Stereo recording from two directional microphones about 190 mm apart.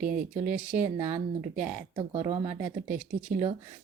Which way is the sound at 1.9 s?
20° right (ahead or behind).